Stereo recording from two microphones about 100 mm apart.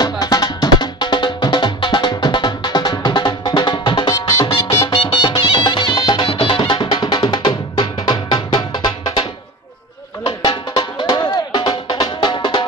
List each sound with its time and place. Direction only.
0.0 s music: 40° left (ahead or behind)
10.2 s music: 65° left (ahead or behind)
10.8 s music: 50° left (ahead or behind)
11.5 s music: 60° left (ahead or behind)